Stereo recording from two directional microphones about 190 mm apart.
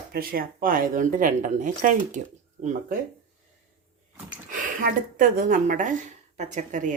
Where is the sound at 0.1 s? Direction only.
50° right (ahead or behind).